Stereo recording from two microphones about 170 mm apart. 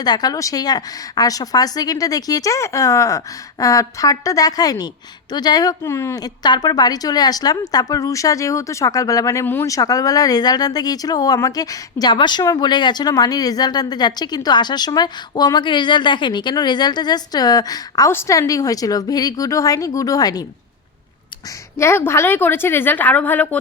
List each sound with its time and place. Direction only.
0.0 s speech: 25° left (ahead or behind)
21.8 s a woman's voice: 15° left (ahead or behind)